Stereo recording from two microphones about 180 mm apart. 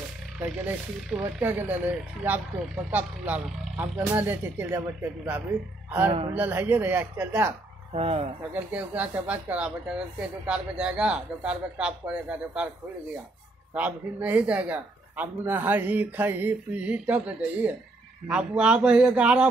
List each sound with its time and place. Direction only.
0.4 s speech: 5° right (ahead or behind)
2.9 s speech: 10° right (ahead or behind)
7.9 s speech: 35° right (ahead or behind)
8.5 s a man's voice: 10° right (ahead or behind)
13.7 s a man's voice: 10° right (ahead or behind)